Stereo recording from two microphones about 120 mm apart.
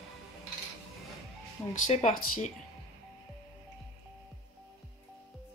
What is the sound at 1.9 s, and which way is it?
Speech, 65° left (ahead or behind).